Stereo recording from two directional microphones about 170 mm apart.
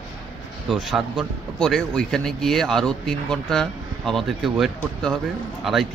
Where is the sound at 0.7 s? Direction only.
Centre (ahead or behind).